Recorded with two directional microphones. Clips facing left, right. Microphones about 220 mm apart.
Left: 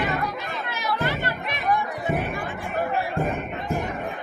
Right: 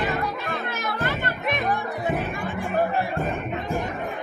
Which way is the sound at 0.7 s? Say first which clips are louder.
Left 5 dB; 50° right (ahead or behind).